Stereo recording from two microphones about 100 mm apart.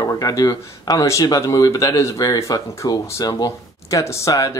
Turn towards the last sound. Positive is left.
turn(degrees=35)  # may be behind; listen again after turning